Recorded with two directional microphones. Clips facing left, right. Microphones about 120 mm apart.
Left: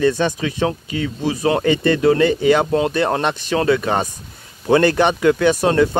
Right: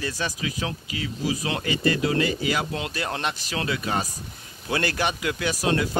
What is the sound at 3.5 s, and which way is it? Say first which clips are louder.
Speech: left 11 dB; 50° left (ahead or behind).